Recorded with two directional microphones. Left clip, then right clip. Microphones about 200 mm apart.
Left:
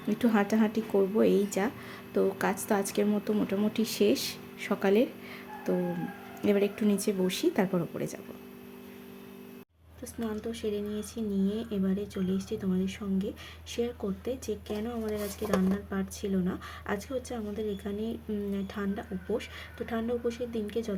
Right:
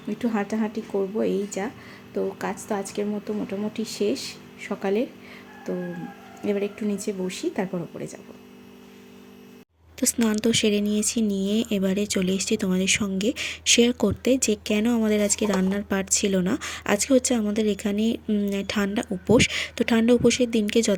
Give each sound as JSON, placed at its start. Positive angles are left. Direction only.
{"t": 0.1, "sound": "a woman's voice", "side_deg": 10}
{"t": 6.4, "sound": "a woman's voice", "side_deg": 10}
{"t": 10.0, "sound": "speech", "side_deg": -45}